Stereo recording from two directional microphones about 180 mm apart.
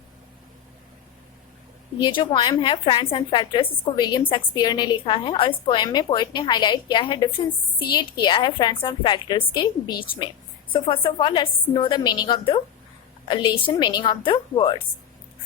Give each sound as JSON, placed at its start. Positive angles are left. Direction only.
{"t": 2.0, "sound": "a woman's voice", "side_deg": 25}